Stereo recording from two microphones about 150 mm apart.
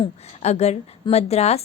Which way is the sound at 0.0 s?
45° left (ahead or behind).